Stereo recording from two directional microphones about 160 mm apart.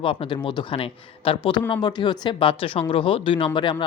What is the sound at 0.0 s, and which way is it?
Speech, 35° left (ahead or behind).